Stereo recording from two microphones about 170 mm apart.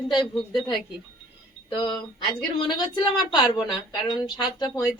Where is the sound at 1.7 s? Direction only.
25° left (ahead or behind).